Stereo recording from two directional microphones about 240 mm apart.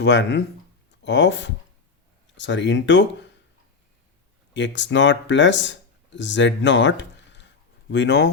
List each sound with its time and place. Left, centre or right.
0.0 s speech: left
4.5 s speech: left